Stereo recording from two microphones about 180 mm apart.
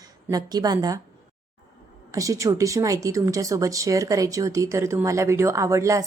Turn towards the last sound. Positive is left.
turn(degrees=-15)  # may be behind; listen again after turning